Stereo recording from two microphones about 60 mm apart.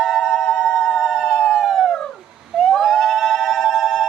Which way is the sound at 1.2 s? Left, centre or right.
Centre.